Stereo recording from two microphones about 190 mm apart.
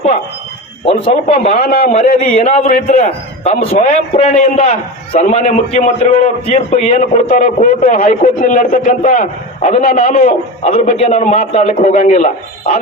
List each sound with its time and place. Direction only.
0.9 s a man's voice: 30° left (ahead or behind)
1.3 s a man's voice: 45° left (ahead or behind)
2.0 s a man's voice: 30° left (ahead or behind); by 10.3 s 50° left (ahead or behind)
10.6 s a man's voice: 35° left (ahead or behind)